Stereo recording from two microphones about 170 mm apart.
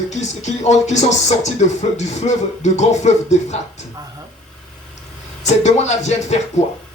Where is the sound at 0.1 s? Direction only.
45° left (ahead or behind).